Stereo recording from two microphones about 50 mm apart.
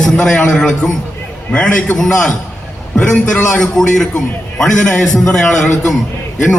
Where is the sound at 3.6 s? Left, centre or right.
Centre.